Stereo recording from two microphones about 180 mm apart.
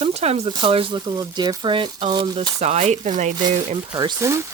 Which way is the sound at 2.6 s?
35° right (ahead or behind).